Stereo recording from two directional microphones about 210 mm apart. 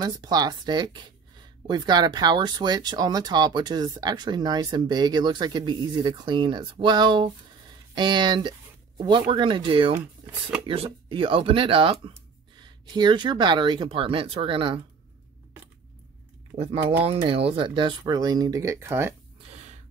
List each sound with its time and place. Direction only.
0.0 s speech: 20° right (ahead or behind)
16.5 s speech: 30° right (ahead or behind); by 19.1 s 10° right (ahead or behind)